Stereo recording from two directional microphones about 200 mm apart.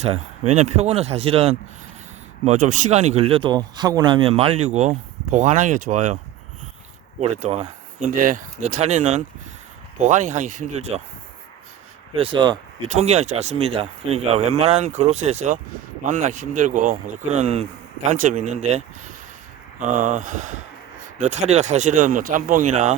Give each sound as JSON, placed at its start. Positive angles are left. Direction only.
{"t": 0.0, "sound": "speech", "side_deg": -30}
{"t": 7.2, "sound": "speech", "side_deg": -35}
{"t": 12.1, "sound": "speech", "side_deg": -25}